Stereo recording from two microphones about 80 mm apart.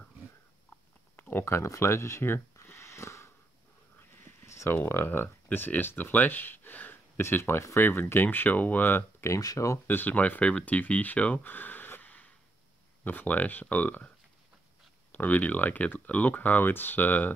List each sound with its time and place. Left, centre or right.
1.1 s a sound: left
1.4 s speech: left
9.4 s speech: left
9.8 s speech: left
15.1 s speech: left